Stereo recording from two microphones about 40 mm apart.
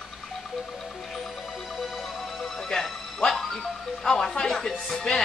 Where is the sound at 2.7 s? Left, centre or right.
Centre.